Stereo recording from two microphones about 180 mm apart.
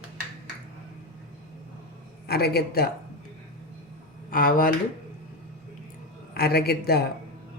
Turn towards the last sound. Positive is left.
turn(degrees=60)  # may be behind; listen again after turning